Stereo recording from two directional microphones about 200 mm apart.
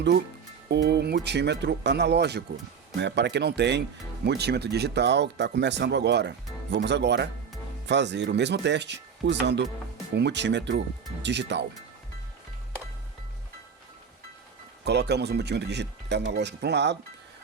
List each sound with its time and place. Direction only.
0.7 s speech: 55° right (ahead or behind)
14.8 s speech: 55° right (ahead or behind)